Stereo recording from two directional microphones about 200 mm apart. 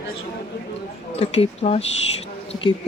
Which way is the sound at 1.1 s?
30° left (ahead or behind).